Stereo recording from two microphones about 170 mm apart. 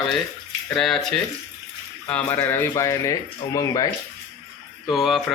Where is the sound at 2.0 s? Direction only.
10° left (ahead or behind).